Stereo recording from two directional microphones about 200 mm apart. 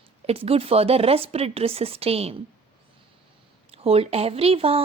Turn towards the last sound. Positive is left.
turn(degrees=-30)  # may be behind; listen again after turning